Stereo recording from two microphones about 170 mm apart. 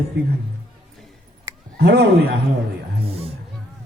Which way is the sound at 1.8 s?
80° right.